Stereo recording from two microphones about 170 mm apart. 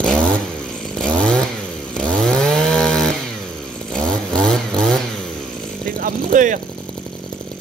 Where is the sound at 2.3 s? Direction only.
5° left (ahead or behind).